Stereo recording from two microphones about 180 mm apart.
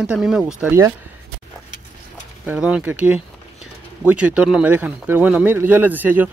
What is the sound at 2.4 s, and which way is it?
Speech, 5° right (ahead or behind).